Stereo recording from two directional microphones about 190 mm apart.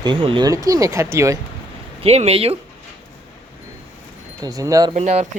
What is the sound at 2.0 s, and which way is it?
Speech, 35° right (ahead or behind).